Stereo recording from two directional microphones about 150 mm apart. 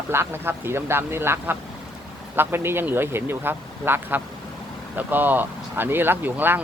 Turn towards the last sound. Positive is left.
turn(degrees=-10)  # may be behind; listen again after turning